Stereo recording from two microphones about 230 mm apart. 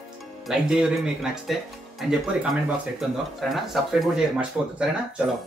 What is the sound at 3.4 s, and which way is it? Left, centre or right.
Speech, centre.